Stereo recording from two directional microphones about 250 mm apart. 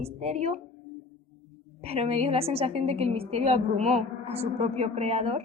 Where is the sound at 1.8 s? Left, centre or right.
Right.